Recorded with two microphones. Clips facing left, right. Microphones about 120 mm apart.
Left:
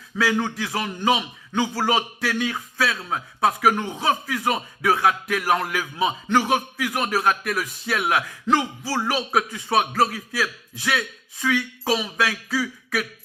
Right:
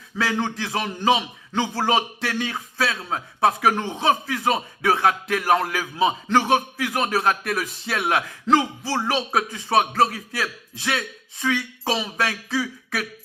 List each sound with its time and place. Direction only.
0.3 s speech: 30° right (ahead or behind)
12.6 s throat clearing: 35° right (ahead or behind)